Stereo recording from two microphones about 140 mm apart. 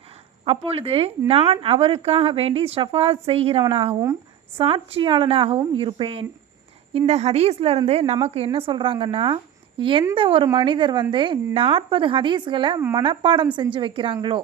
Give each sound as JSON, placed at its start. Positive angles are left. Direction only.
{"t": 0.4, "sound": "a woman's voice", "side_deg": -45}